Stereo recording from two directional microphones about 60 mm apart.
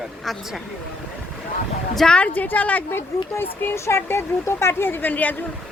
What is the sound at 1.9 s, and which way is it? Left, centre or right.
Speech, centre.